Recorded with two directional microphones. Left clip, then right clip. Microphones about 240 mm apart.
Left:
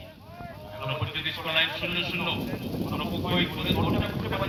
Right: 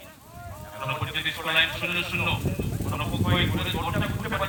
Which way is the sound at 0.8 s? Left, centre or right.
Left.